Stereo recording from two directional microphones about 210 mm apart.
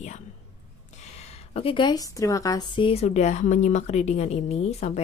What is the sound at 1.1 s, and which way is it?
A woman's voice, 30° left (ahead or behind).